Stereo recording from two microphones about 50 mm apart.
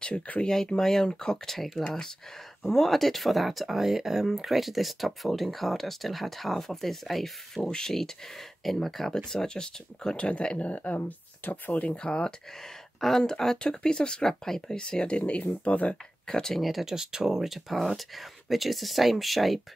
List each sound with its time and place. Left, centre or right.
0.0 s speech: left
12.1 s speech: centre
16.3 s speech: centre
16.5 s speech: centre